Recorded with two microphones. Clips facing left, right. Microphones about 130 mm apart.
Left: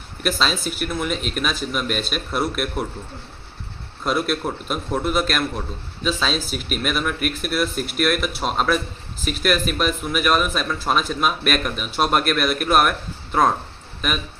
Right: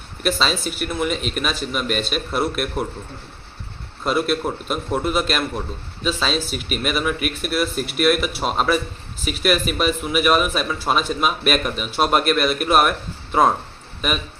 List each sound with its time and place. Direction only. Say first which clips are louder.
0.2 s a man's voice: right 1 dB; centre (ahead or behind)
4.0 s a man's voice: right 2 dB; centre (ahead or behind)